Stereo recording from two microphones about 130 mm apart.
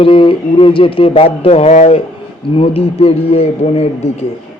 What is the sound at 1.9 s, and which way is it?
Speech, 45° left (ahead or behind).